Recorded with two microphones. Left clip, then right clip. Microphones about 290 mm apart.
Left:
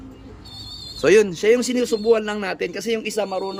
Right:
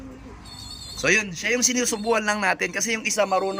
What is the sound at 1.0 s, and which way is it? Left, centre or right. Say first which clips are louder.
A man's voice: left 7 dB; centre.